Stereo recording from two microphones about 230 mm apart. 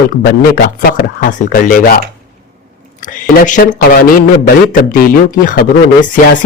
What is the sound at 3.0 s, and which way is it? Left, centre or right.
Speech, left.